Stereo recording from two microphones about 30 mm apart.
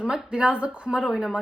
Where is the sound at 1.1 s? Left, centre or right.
Centre.